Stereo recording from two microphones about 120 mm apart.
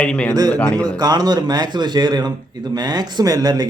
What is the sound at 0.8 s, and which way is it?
A man's voice, 35° right (ahead or behind).